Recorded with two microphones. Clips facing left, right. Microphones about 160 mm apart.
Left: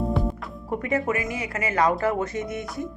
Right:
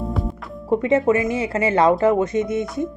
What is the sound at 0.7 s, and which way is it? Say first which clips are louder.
Speech: right 8 dB; 25° right (ahead or behind).